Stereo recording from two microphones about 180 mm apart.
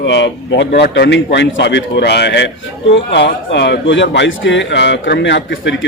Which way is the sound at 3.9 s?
85° left.